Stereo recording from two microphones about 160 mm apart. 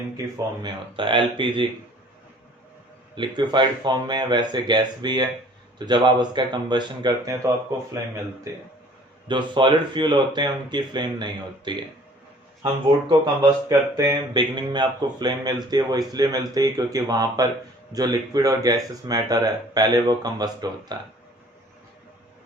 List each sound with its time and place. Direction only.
0.6 s speech: 30° right (ahead or behind)
3.2 s speech: 30° right (ahead or behind)
9.2 s speech: 30° right (ahead or behind)